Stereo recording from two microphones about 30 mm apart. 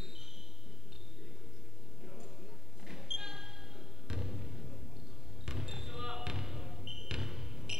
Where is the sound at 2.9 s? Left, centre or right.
Centre.